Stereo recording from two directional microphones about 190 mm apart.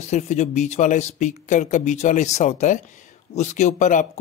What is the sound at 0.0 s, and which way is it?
Speech, 35° left (ahead or behind).